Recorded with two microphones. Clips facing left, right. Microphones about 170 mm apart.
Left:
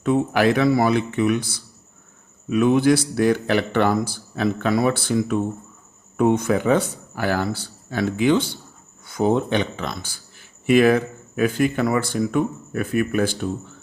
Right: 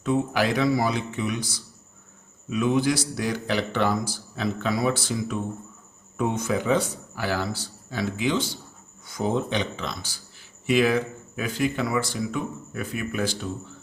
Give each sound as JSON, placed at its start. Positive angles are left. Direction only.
{"t": 0.0, "sound": "a man's voice", "side_deg": 60}